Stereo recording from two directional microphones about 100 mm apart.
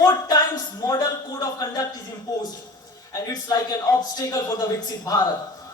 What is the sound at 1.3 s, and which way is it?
Speech, 40° left (ahead or behind).